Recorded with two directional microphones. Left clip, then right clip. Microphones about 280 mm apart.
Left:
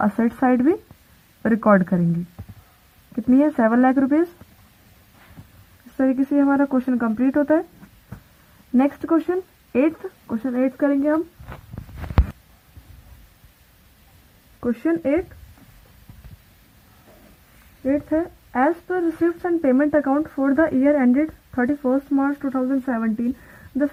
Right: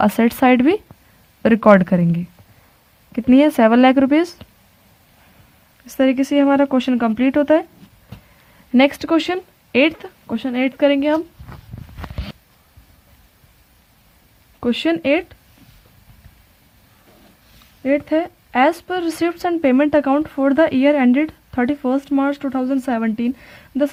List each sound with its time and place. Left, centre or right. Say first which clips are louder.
0.0 s speech: right 5 dB; right
6.0 s speech: right 4 dB; right
8.7 s speech: right 5 dB; right
14.6 s speech: right 4 dB; right
17.8 s speech: right 4 dB; right